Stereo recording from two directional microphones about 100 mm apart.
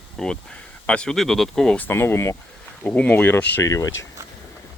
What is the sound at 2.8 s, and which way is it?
Speech, 10° left (ahead or behind).